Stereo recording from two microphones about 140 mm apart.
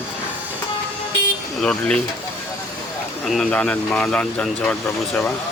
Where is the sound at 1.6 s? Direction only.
5° left (ahead or behind).